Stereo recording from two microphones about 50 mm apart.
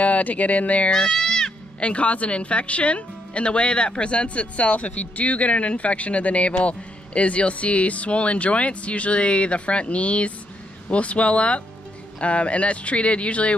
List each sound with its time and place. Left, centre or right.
0.0 s speech: left
0.9 s speech: centre
1.8 s speech: left